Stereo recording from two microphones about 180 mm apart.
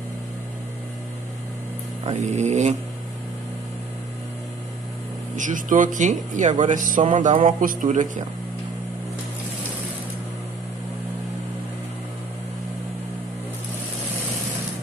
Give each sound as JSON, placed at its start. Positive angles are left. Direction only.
{"t": 2.0, "sound": "vehicle", "side_deg": -40}
{"t": 5.3, "sound": "speech", "side_deg": -45}